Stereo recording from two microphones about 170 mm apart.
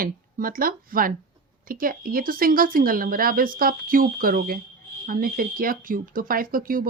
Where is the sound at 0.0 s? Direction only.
55° right (ahead or behind).